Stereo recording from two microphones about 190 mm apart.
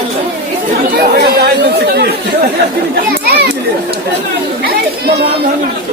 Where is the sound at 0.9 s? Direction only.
55° right (ahead or behind).